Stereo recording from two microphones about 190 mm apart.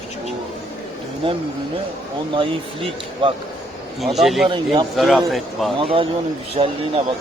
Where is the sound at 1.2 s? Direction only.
25° right (ahead or behind).